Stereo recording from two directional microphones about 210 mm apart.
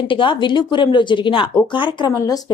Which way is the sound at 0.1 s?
25° left (ahead or behind).